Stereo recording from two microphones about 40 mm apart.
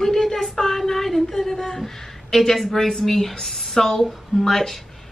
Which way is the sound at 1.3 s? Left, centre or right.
Centre.